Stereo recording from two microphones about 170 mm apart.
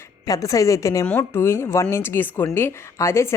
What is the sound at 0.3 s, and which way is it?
A woman's voice, 20° left (ahead or behind).